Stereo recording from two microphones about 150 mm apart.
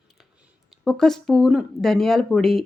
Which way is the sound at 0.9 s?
5° left (ahead or behind).